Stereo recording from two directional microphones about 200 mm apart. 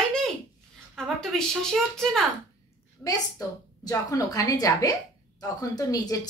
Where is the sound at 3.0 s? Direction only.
20° left (ahead or behind).